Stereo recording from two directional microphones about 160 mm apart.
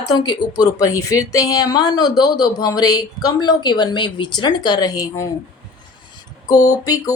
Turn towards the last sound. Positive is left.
turn(degrees=25)  # may be behind; listen again after turning